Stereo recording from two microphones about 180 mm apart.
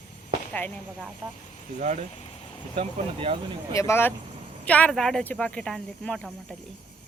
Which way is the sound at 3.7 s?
15° left (ahead or behind).